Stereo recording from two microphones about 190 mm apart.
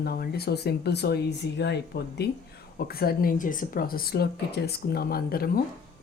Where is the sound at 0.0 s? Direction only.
55° left (ahead or behind).